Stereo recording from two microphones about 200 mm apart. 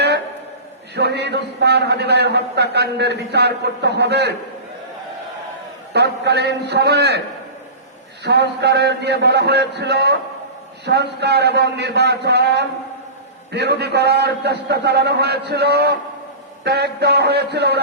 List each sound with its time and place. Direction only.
0.9 s a man's voice: 55° right (ahead or behind)
5.9 s a man's voice: 55° right (ahead or behind)
8.2 s a man's voice: 55° right (ahead or behind)